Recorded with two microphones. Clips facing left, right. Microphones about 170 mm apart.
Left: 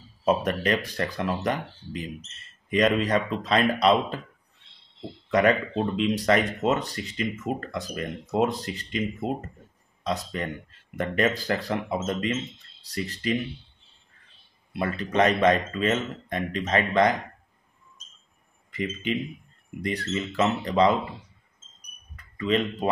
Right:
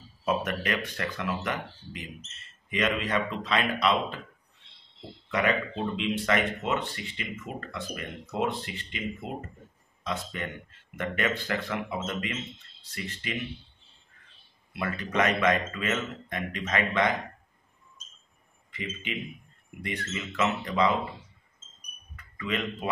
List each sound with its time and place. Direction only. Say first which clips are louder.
0.2 s speech: left 5 dB; 35° left (ahead or behind)
5.9 s speech: left 5 dB; 40° left (ahead or behind)
14.7 s speech: left 4 dB; 30° left (ahead or behind)
18.7 s speech: left 8 dB; 45° left (ahead or behind)
22.1 s a sound: left 7 dB; 30° left (ahead or behind)